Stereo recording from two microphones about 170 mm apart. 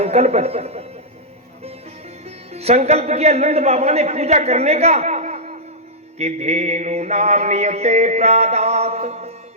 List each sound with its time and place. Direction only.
0.0 s mantra: 40° right (ahead or behind)
2.5 s mantra: 40° right (ahead or behind)